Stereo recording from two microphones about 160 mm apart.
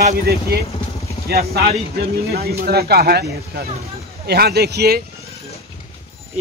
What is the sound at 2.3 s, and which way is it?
Speech, 75° right (ahead or behind).